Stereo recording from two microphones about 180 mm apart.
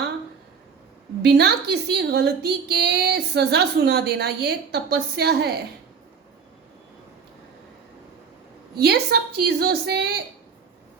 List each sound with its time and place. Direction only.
1.2 s a woman's voice: 65° right (ahead or behind)
8.7 s a woman's voice: 65° right (ahead or behind)